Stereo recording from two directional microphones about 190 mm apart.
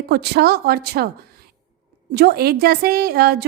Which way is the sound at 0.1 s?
60° right (ahead or behind).